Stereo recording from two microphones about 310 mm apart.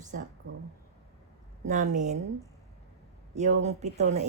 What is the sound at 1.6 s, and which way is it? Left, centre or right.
Speech, right.